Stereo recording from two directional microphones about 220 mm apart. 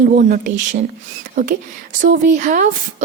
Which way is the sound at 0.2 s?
35° right (ahead or behind).